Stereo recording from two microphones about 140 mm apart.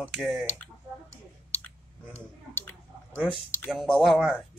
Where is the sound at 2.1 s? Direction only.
15° left (ahead or behind).